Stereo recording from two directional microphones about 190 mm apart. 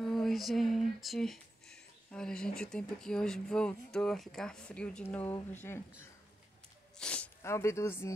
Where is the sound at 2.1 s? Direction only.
5° left (ahead or behind).